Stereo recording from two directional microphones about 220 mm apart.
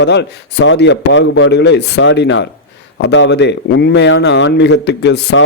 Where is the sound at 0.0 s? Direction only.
50° left (ahead or behind).